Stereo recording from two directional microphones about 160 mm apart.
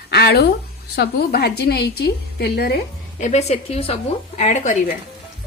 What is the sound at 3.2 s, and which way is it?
A woman's voice, 45° left (ahead or behind).